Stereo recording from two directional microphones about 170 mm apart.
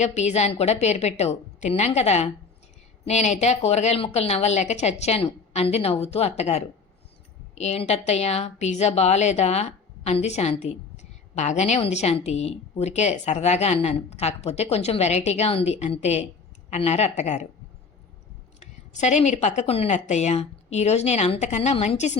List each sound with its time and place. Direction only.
0.0 s a woman's voice: 40° left (ahead or behind)
18.6 s a woman's voice: 45° left (ahead or behind)